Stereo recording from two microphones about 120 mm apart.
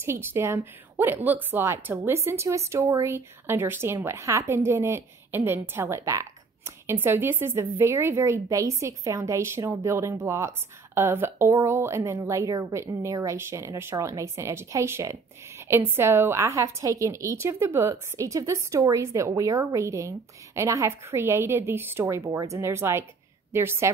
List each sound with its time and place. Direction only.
0.0 s a woman's voice: 20° right (ahead or behind)